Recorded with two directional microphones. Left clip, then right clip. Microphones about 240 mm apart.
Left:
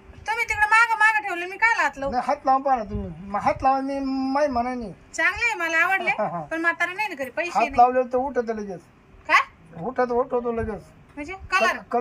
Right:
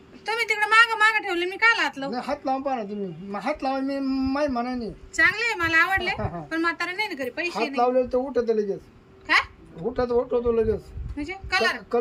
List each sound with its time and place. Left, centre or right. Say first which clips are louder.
0.2 s a sound: left 1 dB; centre
2.0 s speech: left 6 dB; centre
4.0 s a woman's voice: even; centre
4.3 s a woman's voice: left 6 dB; centre
9.9 s speech: left 1 dB; centre
11.2 s a woman's voice: left 2 dB; centre